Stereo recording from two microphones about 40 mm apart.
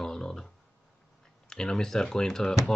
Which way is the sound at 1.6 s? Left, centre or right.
Centre.